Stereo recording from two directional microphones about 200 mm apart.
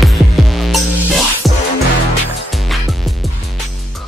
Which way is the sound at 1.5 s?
15° right (ahead or behind).